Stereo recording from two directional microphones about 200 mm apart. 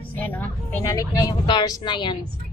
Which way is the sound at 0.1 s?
10° left (ahead or behind).